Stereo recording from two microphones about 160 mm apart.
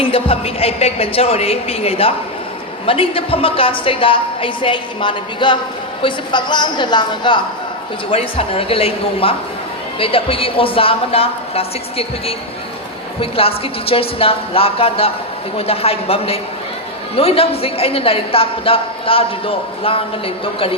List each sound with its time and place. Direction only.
0.0 s a man's voice: 35° left (ahead or behind)